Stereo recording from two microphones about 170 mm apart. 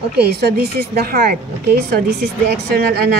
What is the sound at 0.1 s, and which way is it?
Speech, 70° right (ahead or behind).